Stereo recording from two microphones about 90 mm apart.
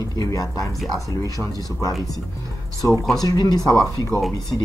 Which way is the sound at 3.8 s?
35° left (ahead or behind).